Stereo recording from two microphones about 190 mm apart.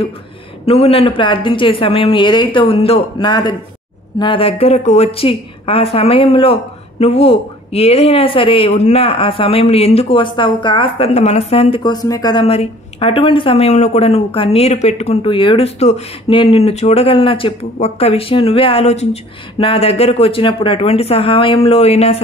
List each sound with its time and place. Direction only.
0.7 s a woman's voice: 30° left (ahead or behind)